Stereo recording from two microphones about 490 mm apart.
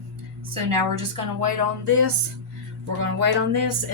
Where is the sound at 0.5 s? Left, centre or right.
Right.